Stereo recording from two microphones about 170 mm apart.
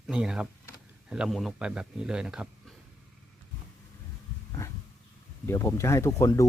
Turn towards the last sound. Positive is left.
turn(degrees=20)  # may be behind; listen again after turning